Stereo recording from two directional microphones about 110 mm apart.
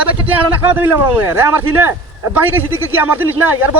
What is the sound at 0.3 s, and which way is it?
A man's voice, 15° right (ahead or behind).